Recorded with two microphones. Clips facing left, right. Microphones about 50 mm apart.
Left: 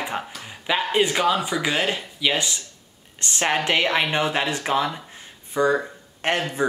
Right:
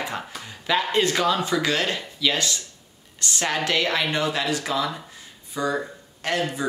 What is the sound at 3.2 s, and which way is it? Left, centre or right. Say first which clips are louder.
Speech: left 2 dB; left.